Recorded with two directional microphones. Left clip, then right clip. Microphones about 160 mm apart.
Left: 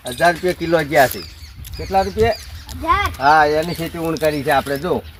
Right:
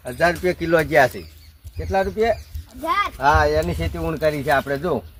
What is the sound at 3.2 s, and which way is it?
Speech, 10° right (ahead or behind).